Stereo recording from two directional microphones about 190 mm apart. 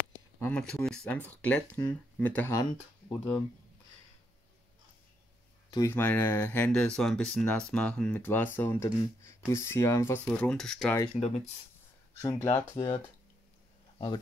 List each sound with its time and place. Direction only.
0.4 s speech: 5° left (ahead or behind)
5.7 s speech: 15° left (ahead or behind)
11.1 s speech: 35° left (ahead or behind)
12.2 s speech: 15° left (ahead or behind)
13.9 s speech: 25° left (ahead or behind)